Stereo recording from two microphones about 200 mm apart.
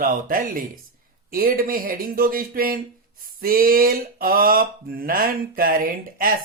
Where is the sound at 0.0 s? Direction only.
45° right (ahead or behind).